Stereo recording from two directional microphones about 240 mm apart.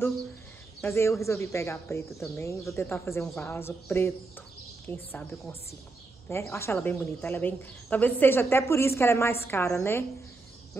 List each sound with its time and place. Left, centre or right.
0.7 s speech: centre